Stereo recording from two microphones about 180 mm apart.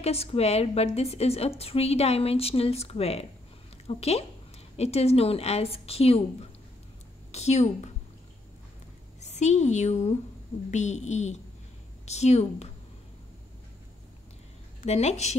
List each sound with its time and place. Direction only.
0.0 s a woman's voice: 35° left (ahead or behind)
7.3 s a woman's voice: 35° left (ahead or behind)
9.2 s a woman's voice: 40° left (ahead or behind)
14.8 s a woman's voice: 40° left (ahead or behind)